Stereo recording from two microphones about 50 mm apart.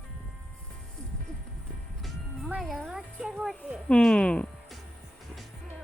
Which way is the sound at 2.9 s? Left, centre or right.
Centre.